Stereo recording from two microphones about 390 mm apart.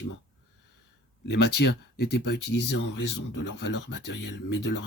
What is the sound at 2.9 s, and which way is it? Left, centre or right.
Speech, left.